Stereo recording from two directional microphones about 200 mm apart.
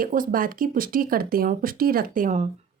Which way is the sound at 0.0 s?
45° right (ahead or behind).